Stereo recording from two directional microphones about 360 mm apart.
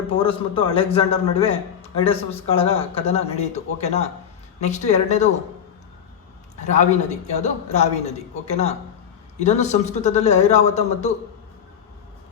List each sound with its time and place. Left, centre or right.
0.1 s a man's voice: centre
6.6 s a man's voice: centre